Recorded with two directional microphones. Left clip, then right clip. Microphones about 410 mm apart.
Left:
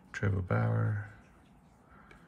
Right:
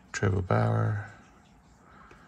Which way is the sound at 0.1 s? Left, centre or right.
Centre.